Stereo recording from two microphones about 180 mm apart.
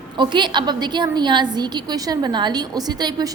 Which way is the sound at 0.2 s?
25° right (ahead or behind).